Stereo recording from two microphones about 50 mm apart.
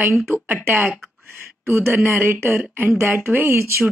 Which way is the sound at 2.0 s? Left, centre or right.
Right.